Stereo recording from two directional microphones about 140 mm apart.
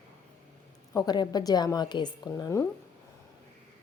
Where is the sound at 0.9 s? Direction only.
30° left (ahead or behind).